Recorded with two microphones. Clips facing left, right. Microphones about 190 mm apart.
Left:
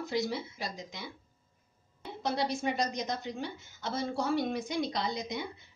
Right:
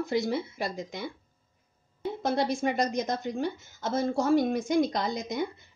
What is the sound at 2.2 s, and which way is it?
A woman's voice, 50° right (ahead or behind).